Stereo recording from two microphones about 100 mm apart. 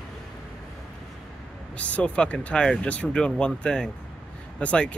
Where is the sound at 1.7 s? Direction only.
15° left (ahead or behind).